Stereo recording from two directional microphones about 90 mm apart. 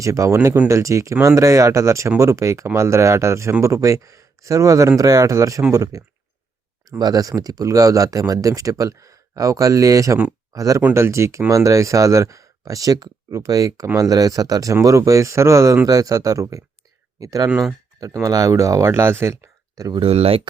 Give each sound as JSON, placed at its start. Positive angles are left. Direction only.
{"t": 0.0, "sound": "speech", "side_deg": -35}
{"t": 7.0, "sound": "speech", "side_deg": -45}
{"t": 18.9, "sound": "speech", "side_deg": -25}
{"t": 19.9, "sound": "speech", "side_deg": -75}